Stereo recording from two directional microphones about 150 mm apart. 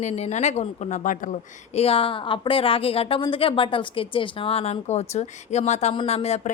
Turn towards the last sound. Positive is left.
turn(degrees=45)  # may be behind; listen again after turning